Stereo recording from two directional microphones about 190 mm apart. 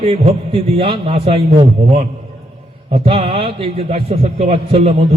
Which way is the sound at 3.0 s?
30° right (ahead or behind).